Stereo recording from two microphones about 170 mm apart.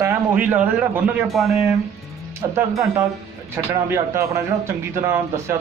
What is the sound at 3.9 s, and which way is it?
Speech, 15° right (ahead or behind).